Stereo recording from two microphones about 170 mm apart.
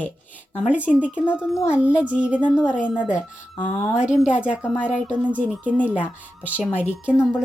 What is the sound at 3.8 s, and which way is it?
A woman's voice, 5° right (ahead or behind).